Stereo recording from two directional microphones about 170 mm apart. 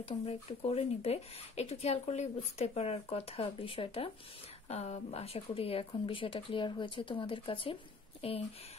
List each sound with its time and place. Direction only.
0.0 s speech: 35° left (ahead or behind)